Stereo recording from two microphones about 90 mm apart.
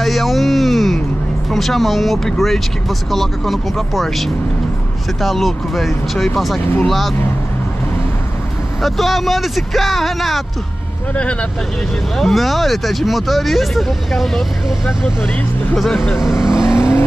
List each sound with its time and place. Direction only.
0.0 s music: centre (ahead or behind)
1.5 s speech: centre (ahead or behind)
6.6 s speech: 25° left (ahead or behind)
6.9 s speech: centre (ahead or behind)
8.8 s speech: centre (ahead or behind)
12.2 s speech: centre (ahead or behind)
16.6 s vehicle: 30° left (ahead or behind)